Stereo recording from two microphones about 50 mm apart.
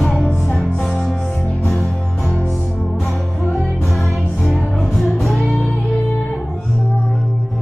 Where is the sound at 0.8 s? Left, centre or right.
Centre.